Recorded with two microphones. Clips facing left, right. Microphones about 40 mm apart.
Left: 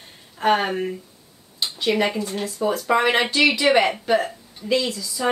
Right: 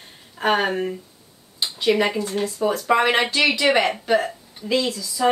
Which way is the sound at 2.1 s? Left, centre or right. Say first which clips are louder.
Right 2 dB; centre.